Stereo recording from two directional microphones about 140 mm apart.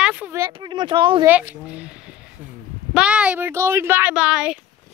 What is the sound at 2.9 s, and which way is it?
Speech, 5° right (ahead or behind).